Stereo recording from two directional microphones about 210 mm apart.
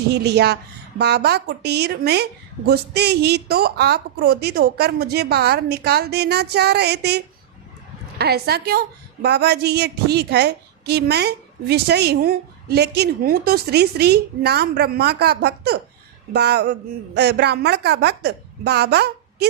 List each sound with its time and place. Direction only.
0.1 s a woman's voice: 50° right (ahead or behind)
8.2 s a woman's voice: 50° right (ahead or behind)